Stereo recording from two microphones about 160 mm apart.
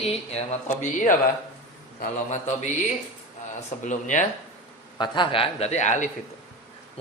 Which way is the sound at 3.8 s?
50° left (ahead or behind).